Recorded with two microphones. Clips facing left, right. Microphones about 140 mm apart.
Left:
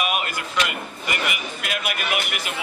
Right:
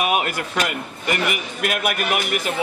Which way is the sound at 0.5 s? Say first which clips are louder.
Left 1 dB; 45° right (ahead or behind).